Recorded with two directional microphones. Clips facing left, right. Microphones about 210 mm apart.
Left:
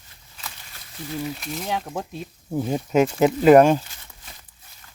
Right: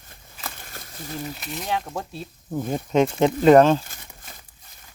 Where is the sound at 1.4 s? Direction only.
Centre (ahead or behind).